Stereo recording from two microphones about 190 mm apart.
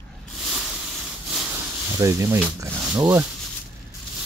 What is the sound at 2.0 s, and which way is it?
Speech, 15° right (ahead or behind).